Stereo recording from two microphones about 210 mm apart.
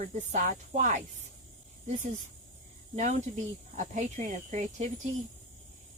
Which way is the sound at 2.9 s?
35° right (ahead or behind).